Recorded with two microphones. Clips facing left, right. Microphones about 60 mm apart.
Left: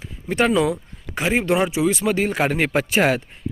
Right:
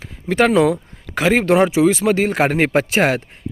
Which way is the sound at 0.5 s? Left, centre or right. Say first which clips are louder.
Right 5 dB; right.